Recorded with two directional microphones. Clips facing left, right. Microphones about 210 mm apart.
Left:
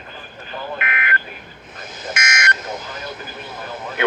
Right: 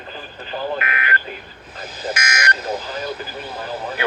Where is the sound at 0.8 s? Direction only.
35° right (ahead or behind).